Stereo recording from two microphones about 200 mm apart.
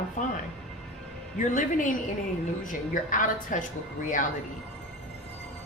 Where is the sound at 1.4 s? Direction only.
40° left (ahead or behind).